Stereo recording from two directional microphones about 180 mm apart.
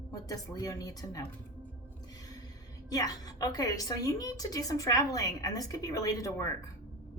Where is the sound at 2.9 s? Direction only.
20° left (ahead or behind).